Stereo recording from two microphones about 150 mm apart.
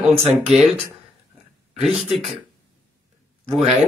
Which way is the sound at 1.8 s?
Centre (ahead or behind).